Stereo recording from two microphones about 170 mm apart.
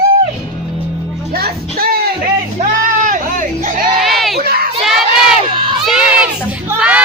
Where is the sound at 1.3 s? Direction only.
60° right (ahead or behind).